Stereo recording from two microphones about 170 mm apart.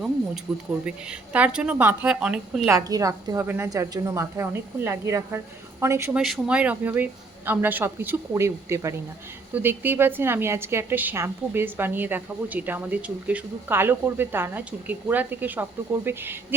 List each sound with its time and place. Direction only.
0.5 s a woman's voice: centre (ahead or behind)
2.6 s a woman's voice: 20° right (ahead or behind)
6.1 s a woman's voice: 5° right (ahead or behind)